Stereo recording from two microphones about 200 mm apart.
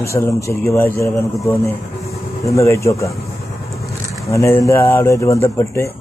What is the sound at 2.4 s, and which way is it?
Speech, 15° left (ahead or behind).